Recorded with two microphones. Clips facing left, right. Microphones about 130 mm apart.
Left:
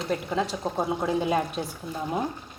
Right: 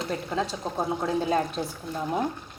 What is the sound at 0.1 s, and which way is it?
Speech, centre (ahead or behind).